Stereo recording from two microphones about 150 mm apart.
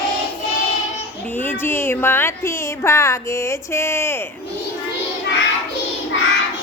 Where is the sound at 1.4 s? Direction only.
15° left (ahead or behind).